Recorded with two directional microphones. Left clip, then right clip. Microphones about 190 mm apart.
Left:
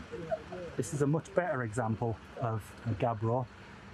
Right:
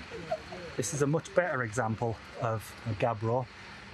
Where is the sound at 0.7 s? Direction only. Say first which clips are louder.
Right 3 dB; 10° left (ahead or behind).